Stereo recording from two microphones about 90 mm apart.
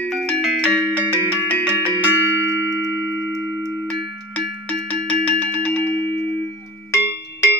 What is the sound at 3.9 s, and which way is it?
Cowbell, 15° left (ahead or behind).